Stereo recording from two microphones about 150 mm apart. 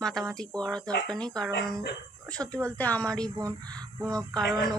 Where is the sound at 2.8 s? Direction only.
10° left (ahead or behind).